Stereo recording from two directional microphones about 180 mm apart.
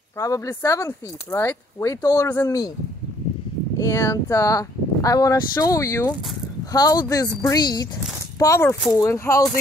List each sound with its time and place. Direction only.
0.2 s speech: 20° left (ahead or behind)
3.7 s speech: 20° left (ahead or behind)